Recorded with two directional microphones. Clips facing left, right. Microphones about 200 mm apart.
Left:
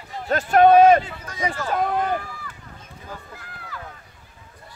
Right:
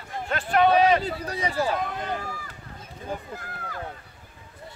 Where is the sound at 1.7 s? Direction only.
50° left (ahead or behind).